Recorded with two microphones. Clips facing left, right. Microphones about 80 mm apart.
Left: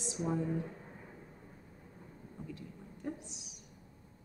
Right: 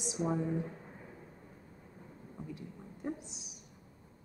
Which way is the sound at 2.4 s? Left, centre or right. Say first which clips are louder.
Right 2 dB; centre.